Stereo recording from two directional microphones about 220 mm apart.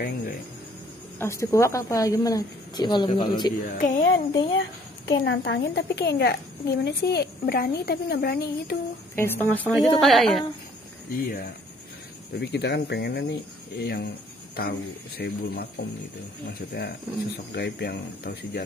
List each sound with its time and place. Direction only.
0.0 s a woman's voice: 45° left (ahead or behind)
1.2 s speech: 15° left (ahead or behind)
3.7 s speech: 35° left (ahead or behind)
4.3 s speech: 20° left (ahead or behind)
5.2 s a woman's voice: 55° left (ahead or behind)
9.1 s a woman's voice: 10° left (ahead or behind)
11.1 s a woman's voice: 40° left (ahead or behind)